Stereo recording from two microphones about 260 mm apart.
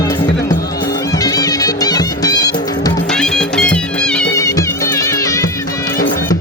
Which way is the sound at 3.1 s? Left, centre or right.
Centre.